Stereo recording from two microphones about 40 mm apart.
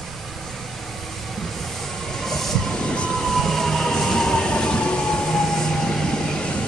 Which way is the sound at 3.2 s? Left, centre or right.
Centre.